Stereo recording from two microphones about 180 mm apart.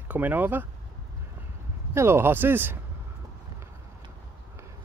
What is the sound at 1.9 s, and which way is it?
Speech, 15° right (ahead or behind).